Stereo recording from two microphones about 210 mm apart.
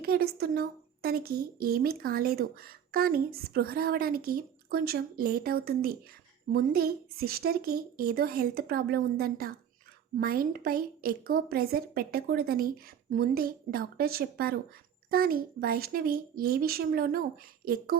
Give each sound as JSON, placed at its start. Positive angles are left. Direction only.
{"t": 0.0, "sound": "a woman's voice", "side_deg": -45}